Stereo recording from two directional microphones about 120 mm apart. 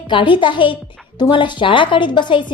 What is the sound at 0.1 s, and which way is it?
A woman's voice, 45° left (ahead or behind).